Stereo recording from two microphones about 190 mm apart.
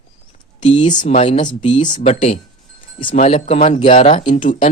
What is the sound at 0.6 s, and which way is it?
Speech, 35° left (ahead or behind).